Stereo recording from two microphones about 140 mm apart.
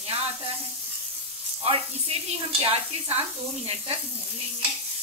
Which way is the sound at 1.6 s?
45° right (ahead or behind).